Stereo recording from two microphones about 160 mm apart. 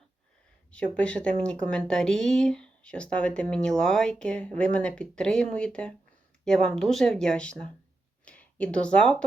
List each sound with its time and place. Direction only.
0.9 s speech: 5° left (ahead or behind)